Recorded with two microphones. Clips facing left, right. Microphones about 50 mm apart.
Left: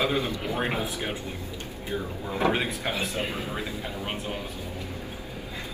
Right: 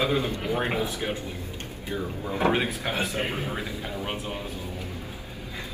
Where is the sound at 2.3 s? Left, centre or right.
Right.